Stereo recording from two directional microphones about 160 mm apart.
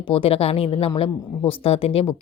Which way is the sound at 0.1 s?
35° left (ahead or behind).